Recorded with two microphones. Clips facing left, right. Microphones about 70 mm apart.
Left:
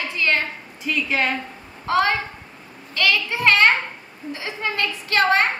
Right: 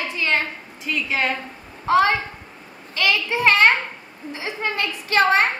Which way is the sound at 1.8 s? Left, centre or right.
Right.